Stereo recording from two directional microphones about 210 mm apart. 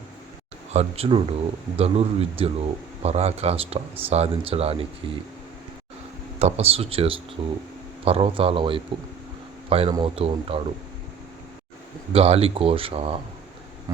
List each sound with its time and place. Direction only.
0.7 s speech: 30° right (ahead or behind)
6.4 s speech: 30° right (ahead or behind)
12.1 s speech: 30° right (ahead or behind)